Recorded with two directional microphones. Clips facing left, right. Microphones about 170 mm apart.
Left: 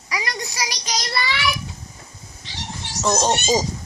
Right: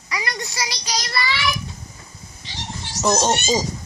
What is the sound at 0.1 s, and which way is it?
Child singing, 15° left (ahead or behind).